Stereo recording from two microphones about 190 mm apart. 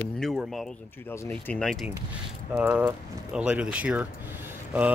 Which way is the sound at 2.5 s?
10° right (ahead or behind).